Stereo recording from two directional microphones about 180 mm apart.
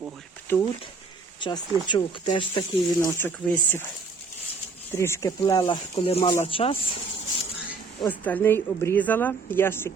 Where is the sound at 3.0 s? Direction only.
15° left (ahead or behind).